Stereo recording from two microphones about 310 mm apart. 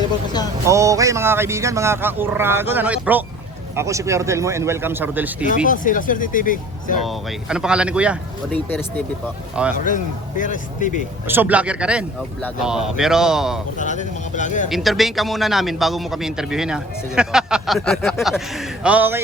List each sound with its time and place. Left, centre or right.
0.7 s speech: centre
5.6 s speech: left
7.0 s a man's voice: centre
9.7 s speech: left
11.3 s a man's voice: centre
13.7 s speech: left
14.7 s a man's voice: centre